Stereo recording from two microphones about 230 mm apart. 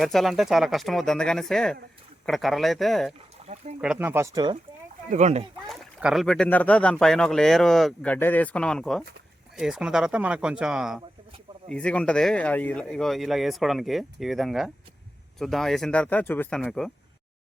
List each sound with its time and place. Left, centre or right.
0.0 s speech: centre
3.4 s speech: right
3.8 s speech: centre
5.0 s speech: right
5.6 s speech: centre